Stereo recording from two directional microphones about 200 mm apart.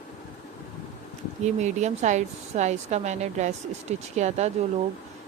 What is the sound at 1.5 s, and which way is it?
A woman's voice, 35° right (ahead or behind).